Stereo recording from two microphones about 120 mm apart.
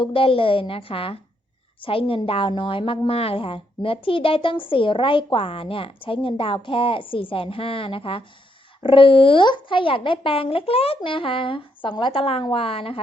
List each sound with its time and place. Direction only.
0.0 s a woman's voice: 50° left (ahead or behind)